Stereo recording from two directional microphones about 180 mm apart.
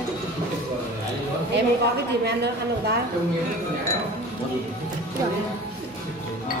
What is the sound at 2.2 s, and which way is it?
Speech, 65° right (ahead or behind).